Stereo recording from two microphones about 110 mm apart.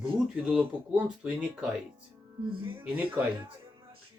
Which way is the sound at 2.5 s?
55° right (ahead or behind).